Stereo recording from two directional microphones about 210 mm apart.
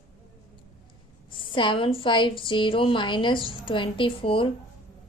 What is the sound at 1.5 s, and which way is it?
A woman's voice, 25° left (ahead or behind).